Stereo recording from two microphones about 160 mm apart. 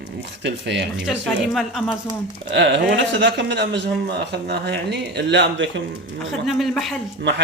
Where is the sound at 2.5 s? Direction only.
90° right.